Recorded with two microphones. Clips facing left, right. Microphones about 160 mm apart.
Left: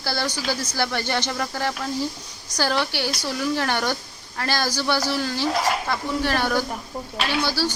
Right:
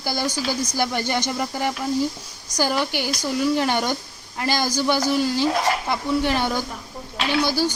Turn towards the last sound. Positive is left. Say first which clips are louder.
# right 3 dB
turn(degrees=-15)  # may be behind; listen again after turning